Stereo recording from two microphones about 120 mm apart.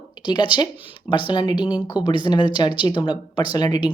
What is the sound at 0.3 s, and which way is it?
Speech, 40° left (ahead or behind).